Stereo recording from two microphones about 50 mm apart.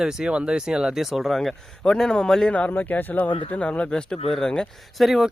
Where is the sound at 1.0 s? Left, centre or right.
Centre.